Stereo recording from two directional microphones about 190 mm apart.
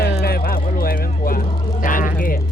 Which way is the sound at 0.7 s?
50° left (ahead or behind).